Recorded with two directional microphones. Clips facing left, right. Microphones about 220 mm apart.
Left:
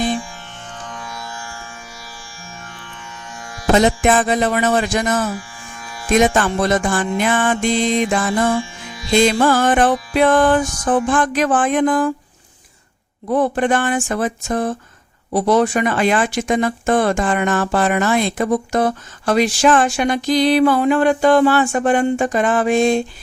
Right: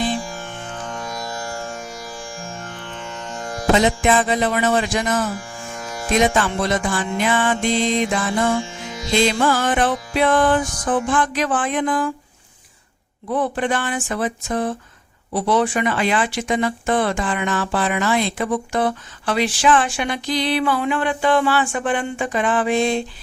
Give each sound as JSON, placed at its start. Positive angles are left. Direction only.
{"t": 0.2, "sound": "music", "side_deg": -45}
{"t": 3.8, "sound": "speech", "side_deg": 45}
{"t": 5.5, "sound": "music", "side_deg": -45}
{"t": 6.1, "sound": "speech", "side_deg": 45}
{"t": 13.3, "sound": "speech", "side_deg": 45}